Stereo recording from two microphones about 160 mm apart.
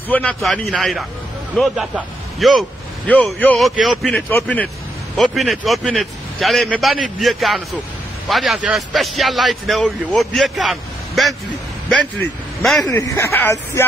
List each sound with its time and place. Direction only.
0.1 s a man's voice: 5° left (ahead or behind)
4.3 s speech: 10° left (ahead or behind)
5.1 s a man's voice: centre (ahead or behind)
12.8 s speech: 20° left (ahead or behind)